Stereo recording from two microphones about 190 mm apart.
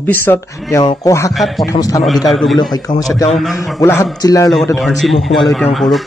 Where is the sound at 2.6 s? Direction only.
20° left (ahead or behind).